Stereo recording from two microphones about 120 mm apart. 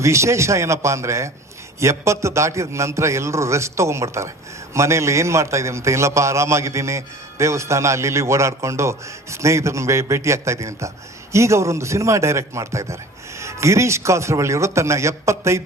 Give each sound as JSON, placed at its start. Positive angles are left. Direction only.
{"t": 0.0, "sound": "a man's voice", "side_deg": -25}